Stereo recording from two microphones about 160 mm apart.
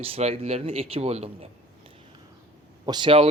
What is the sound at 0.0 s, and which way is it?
Speech, 40° right (ahead or behind).